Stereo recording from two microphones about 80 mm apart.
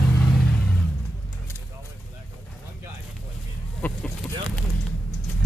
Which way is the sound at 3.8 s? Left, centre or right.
Left.